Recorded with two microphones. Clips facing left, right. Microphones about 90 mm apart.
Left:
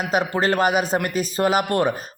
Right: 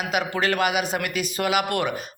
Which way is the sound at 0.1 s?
35° left (ahead or behind).